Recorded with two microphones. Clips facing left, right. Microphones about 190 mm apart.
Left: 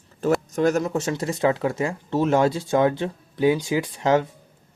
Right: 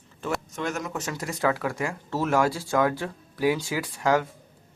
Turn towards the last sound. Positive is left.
turn(degrees=20)  # may be behind; listen again after turning